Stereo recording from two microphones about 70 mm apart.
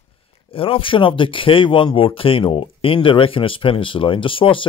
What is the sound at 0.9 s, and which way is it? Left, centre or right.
Speech, left.